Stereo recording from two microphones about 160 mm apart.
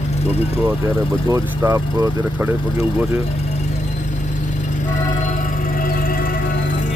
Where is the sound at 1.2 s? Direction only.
20° right (ahead or behind).